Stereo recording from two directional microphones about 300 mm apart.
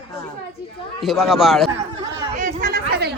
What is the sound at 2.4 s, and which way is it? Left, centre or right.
Chatter, right.